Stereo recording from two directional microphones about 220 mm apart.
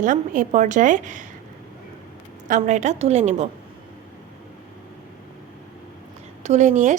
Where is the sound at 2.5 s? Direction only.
35° right (ahead or behind).